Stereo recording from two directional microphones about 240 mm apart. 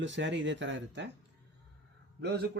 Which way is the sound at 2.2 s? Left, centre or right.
Right.